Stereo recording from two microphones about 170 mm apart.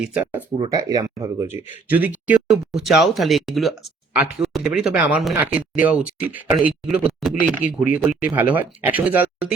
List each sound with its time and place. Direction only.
0.0 s speech: 10° right (ahead or behind)
0.6 s speech: 25° right (ahead or behind)
1.9 s speech: 10° right (ahead or behind)